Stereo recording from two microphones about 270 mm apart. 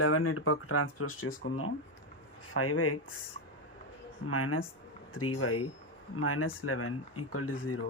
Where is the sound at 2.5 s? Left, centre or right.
Left.